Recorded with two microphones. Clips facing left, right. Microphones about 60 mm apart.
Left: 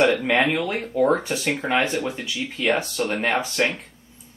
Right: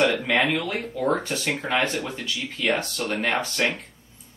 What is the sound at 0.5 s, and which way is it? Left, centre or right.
Speech, centre.